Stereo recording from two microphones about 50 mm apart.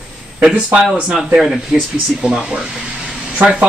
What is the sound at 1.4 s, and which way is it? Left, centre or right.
Speech, centre.